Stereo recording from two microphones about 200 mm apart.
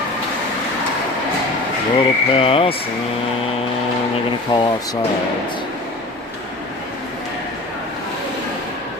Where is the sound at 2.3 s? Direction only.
25° left (ahead or behind).